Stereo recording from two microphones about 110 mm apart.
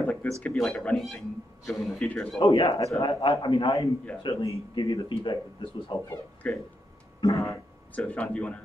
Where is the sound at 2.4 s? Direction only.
50° left (ahead or behind).